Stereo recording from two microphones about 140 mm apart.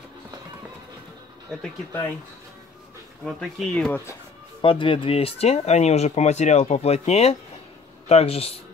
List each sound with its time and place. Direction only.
1.9 s speech: 15° left (ahead or behind)
3.3 s speech: centre (ahead or behind)
3.9 s speech: 20° left (ahead or behind)
4.6 s speech: 35° left (ahead or behind)